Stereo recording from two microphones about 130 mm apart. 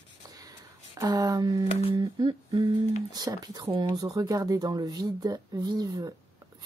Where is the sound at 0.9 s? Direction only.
30° right (ahead or behind).